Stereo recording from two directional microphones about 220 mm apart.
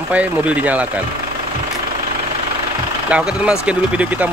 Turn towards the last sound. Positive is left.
turn(degrees=-5)  # may be behind; listen again after turning